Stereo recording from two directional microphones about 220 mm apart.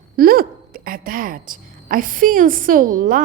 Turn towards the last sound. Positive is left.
turn(degrees=-40)  # may be behind; listen again after turning